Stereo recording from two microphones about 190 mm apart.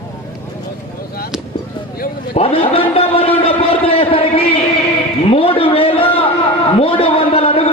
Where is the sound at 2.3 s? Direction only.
30° left (ahead or behind).